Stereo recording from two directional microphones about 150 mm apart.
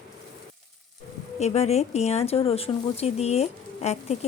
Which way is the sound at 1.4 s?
45° left (ahead or behind).